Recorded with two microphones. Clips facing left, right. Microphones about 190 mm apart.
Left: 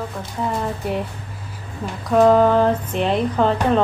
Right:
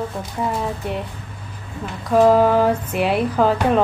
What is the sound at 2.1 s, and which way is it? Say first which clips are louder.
Speech: even; 5° right (ahead or behind).